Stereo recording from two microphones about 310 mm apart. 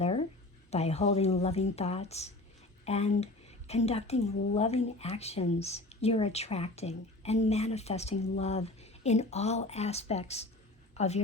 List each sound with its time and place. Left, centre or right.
0.7 s a woman's voice: centre